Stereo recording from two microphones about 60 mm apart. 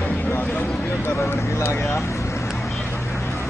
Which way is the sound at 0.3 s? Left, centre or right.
Left.